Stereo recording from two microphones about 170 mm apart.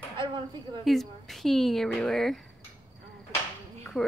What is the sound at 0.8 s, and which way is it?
A woman's voice, centre (ahead or behind).